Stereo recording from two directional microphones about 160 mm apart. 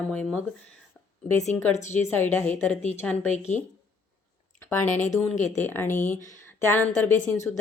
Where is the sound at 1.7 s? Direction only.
50° left (ahead or behind).